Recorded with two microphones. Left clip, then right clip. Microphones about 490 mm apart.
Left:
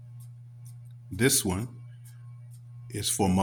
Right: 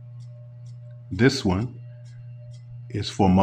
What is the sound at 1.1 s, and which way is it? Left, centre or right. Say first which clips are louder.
Speech: right 5 dB; left.